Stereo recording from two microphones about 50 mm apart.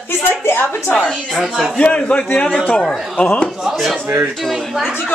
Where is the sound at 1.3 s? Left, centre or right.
Centre.